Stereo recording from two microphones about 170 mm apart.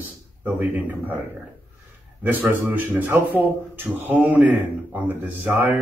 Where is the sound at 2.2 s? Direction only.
10° right (ahead or behind).